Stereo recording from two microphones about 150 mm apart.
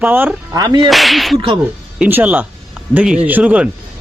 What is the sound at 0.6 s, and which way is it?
Whip, 25° right (ahead or behind).